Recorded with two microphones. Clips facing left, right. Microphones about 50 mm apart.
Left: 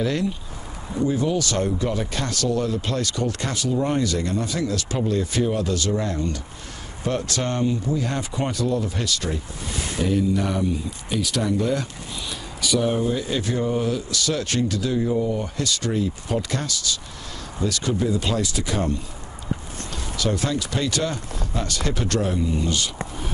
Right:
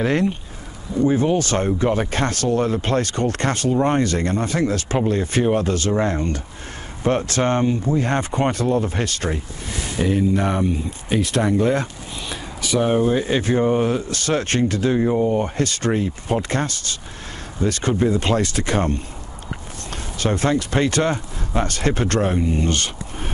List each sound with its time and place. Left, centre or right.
0.0 s speech: right
20.2 s speech: right